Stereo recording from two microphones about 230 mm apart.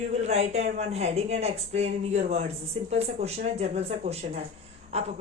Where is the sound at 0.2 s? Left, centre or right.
Right.